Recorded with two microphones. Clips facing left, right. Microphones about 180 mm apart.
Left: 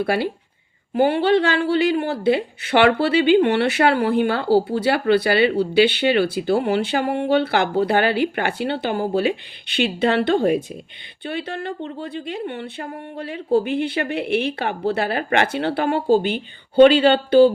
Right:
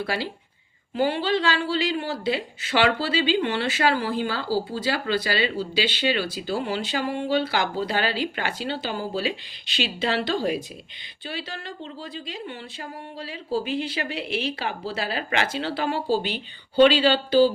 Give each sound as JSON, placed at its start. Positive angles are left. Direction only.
{"t": 0.0, "sound": "speech", "side_deg": 55}